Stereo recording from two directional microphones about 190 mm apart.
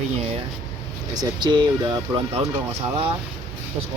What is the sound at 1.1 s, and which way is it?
Speech, 20° right (ahead or behind).